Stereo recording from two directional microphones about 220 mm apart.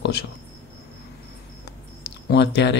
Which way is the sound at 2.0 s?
50° left (ahead or behind).